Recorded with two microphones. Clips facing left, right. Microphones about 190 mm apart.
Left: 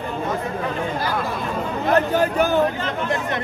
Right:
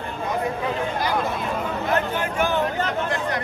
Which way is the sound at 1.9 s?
40° left (ahead or behind).